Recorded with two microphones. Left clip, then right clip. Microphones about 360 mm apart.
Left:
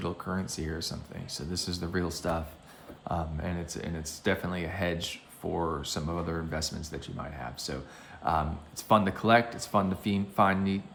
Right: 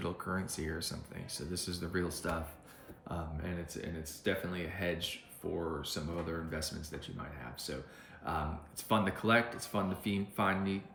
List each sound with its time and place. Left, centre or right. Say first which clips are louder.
0.0 s speech: left 3 dB; centre